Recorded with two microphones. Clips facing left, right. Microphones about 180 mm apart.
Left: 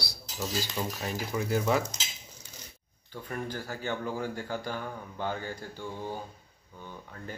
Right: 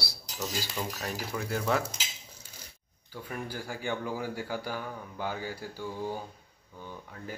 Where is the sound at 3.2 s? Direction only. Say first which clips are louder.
Left 2 dB; 10° right (ahead or behind).